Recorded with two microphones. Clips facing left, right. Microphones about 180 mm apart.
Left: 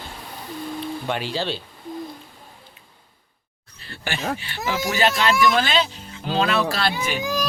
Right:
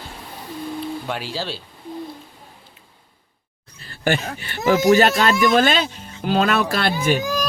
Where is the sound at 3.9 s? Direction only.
45° right (ahead or behind).